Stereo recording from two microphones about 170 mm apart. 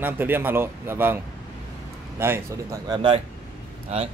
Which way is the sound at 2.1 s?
15° right (ahead or behind).